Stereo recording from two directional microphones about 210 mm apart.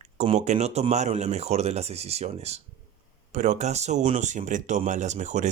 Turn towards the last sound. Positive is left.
turn(degrees=-35)  # may be behind; listen again after turning